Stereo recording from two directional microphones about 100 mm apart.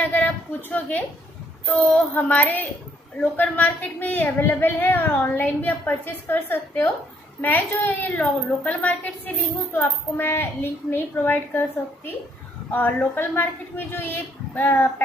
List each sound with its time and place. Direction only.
0.0 s a woman's voice: 15° left (ahead or behind)
12.7 s a woman's voice: 20° left (ahead or behind)